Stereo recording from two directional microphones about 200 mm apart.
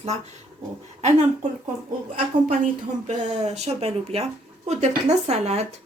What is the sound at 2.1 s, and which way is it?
Speech, 40° right (ahead or behind).